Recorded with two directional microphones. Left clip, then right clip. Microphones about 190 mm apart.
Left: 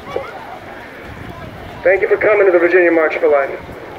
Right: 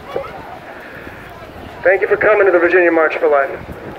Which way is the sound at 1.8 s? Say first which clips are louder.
Even; 20° right (ahead or behind).